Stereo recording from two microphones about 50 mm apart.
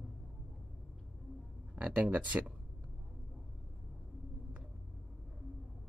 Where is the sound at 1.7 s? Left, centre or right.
Centre.